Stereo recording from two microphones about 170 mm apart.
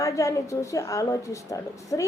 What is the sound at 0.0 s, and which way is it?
A woman's voice, 20° left (ahead or behind).